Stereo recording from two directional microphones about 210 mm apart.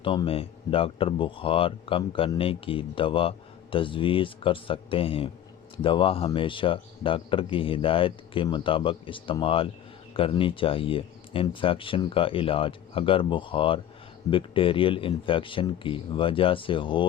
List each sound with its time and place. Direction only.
0.0 s speech: 25° left (ahead or behind)